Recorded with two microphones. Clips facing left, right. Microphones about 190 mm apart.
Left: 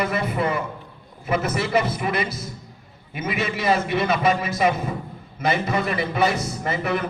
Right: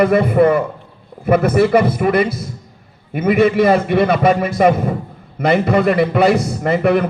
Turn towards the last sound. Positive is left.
turn(degrees=-60)  # may be behind; listen again after turning